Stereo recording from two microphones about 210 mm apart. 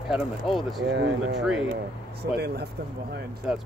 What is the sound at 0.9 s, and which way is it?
Speech, 55° right (ahead or behind).